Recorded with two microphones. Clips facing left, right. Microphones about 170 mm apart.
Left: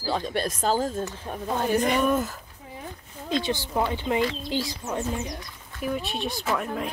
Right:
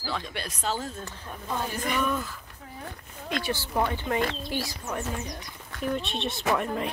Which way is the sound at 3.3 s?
20° left (ahead or behind).